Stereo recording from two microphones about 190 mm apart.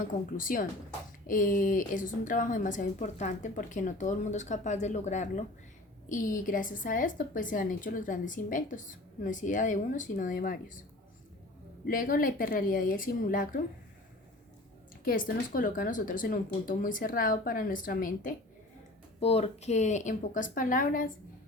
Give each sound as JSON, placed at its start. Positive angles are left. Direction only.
{"t": 0.0, "sound": "a woman's voice", "side_deg": 45}
{"t": 11.9, "sound": "a woman's voice", "side_deg": 50}
{"t": 15.0, "sound": "a woman's voice", "side_deg": 50}
{"t": 19.2, "sound": "a woman's voice", "side_deg": 30}